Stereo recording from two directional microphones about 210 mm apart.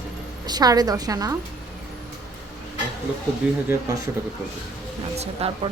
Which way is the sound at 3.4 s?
5° right (ahead or behind).